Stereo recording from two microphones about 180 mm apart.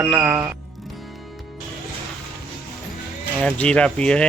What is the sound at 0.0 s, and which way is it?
Speech, 10° right (ahead or behind).